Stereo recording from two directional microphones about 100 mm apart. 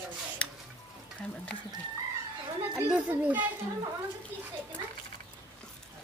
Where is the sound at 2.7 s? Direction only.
15° right (ahead or behind).